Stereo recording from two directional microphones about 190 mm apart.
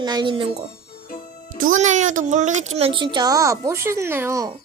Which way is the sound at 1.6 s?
40° right (ahead or behind).